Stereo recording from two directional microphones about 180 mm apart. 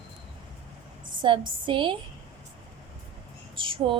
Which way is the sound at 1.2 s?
25° right (ahead or behind).